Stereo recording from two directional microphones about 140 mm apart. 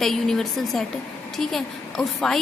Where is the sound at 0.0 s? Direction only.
Centre (ahead or behind).